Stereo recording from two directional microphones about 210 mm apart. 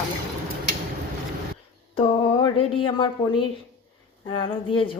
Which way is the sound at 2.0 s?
25° left (ahead or behind).